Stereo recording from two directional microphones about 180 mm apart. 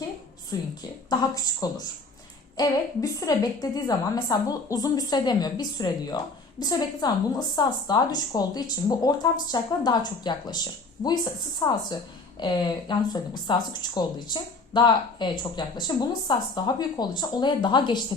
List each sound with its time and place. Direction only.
0.5 s speech: 20° left (ahead or behind)